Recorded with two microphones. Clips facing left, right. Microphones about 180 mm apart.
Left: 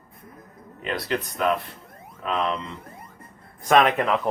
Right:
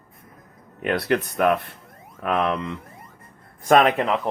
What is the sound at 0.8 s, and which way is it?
Speech, 60° right (ahead or behind).